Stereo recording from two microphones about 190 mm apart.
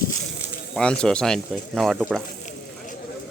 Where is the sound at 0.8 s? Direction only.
5° left (ahead or behind).